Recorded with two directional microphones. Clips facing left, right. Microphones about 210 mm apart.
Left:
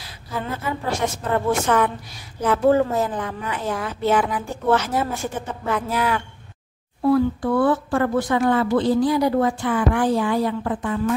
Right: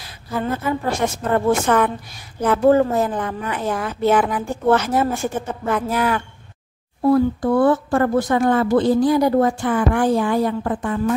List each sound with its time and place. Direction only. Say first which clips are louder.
0.7 s speech: even; 50° right (ahead or behind)